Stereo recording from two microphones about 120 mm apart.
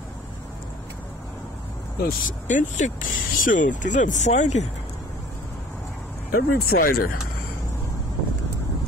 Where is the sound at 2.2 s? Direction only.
90° left; by 4.6 s 75° left (ahead or behind).